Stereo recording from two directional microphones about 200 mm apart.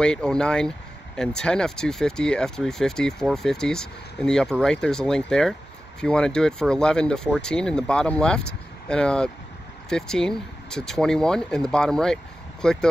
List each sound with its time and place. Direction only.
0.0 s speech: 5° left (ahead or behind)